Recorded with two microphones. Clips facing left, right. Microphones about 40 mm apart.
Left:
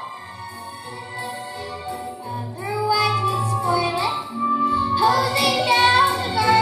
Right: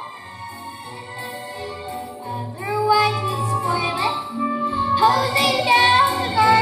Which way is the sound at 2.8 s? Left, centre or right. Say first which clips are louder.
Right 2 dB; right.